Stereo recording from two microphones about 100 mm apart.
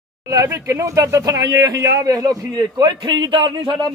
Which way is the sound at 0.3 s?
35° right (ahead or behind).